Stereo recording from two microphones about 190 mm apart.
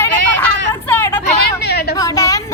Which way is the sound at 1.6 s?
60° left (ahead or behind).